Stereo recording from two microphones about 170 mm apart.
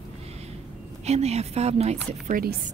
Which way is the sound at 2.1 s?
55° right (ahead or behind).